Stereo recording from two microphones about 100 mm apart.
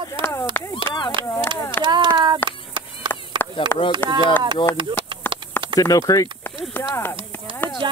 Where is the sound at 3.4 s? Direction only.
50° right (ahead or behind).